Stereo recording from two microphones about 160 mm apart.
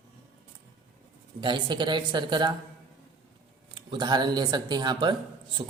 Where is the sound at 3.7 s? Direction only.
30° right (ahead or behind).